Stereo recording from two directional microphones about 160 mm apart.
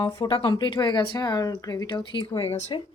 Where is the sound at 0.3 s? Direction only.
30° left (ahead or behind).